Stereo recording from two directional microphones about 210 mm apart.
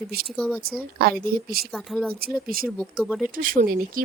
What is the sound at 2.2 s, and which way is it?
Speech, 45° right (ahead or behind).